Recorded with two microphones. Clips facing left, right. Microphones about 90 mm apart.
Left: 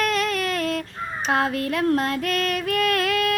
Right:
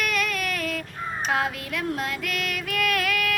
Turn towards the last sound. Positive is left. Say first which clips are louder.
# left 4 dB
turn(degrees=30)  # may be behind; listen again after turning